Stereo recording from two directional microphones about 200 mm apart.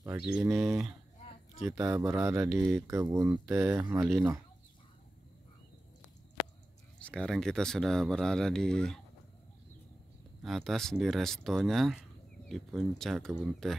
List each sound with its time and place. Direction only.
0.3 s speech: centre (ahead or behind)
1.7 s speech: 15° right (ahead or behind)
7.0 s speech: 5° left (ahead or behind)
10.4 s speech: centre (ahead or behind)